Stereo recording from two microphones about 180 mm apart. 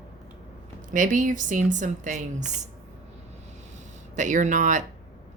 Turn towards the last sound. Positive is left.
turn(degrees=-45)  # may be behind; listen again after turning